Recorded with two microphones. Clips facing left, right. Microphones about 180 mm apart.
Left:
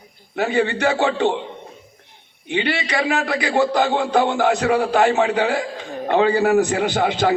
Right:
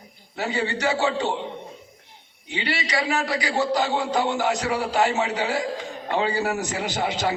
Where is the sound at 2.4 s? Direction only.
60° left (ahead or behind).